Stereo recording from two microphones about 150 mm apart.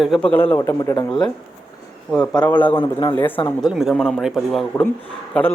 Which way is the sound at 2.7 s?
30° left (ahead or behind).